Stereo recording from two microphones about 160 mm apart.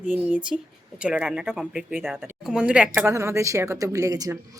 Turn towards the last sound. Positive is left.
turn(degrees=-20)  # may be behind; listen again after turning